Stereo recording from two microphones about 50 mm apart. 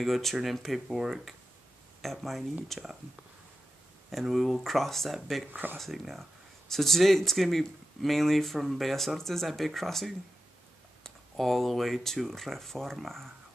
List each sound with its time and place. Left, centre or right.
0.0 s speech: centre
4.1 s speech: centre
5.5 s speech: right
5.8 s speech: centre